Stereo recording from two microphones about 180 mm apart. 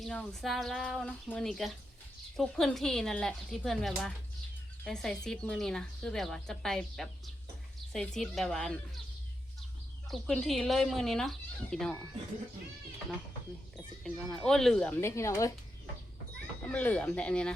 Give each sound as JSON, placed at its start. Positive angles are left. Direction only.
{"t": 0.0, "sound": "speech", "side_deg": 0}
{"t": 10.1, "sound": "speech", "side_deg": 0}
{"t": 14.0, "sound": "speech", "side_deg": 5}
{"t": 15.0, "sound": "speech", "side_deg": 15}
{"t": 16.7, "sound": "speech", "side_deg": 10}